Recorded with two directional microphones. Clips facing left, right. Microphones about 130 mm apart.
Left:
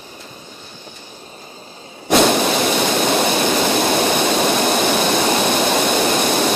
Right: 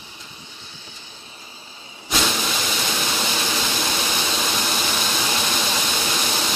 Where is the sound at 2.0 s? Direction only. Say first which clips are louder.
Left 10 dB; 60° left (ahead or behind).